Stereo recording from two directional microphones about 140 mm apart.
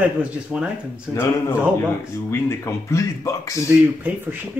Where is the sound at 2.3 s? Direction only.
20° left (ahead or behind).